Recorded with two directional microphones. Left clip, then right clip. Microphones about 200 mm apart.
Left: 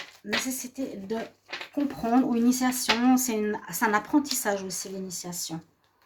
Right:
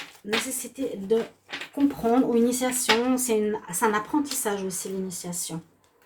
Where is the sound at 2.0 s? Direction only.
45° left (ahead or behind).